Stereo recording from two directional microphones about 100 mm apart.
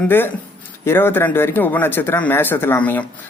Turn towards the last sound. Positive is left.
turn(degrees=15)  # may be behind; listen again after turning